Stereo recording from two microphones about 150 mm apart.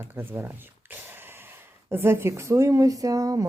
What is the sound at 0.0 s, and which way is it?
A woman's voice, 15° right (ahead or behind).